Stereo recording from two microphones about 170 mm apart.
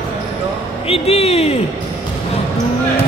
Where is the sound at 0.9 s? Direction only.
35° left (ahead or behind).